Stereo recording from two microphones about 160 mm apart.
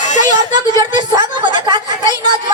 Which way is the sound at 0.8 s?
25° right (ahead or behind).